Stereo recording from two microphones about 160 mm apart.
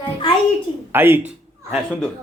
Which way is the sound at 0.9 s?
15° right (ahead or behind).